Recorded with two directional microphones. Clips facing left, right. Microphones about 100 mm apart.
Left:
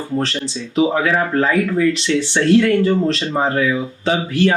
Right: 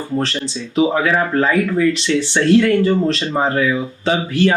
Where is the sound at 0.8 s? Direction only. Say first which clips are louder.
Right 1 dB; 15° right (ahead or behind).